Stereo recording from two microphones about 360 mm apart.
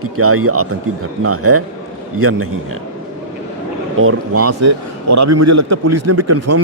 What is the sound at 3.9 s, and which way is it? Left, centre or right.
A man's voice, right.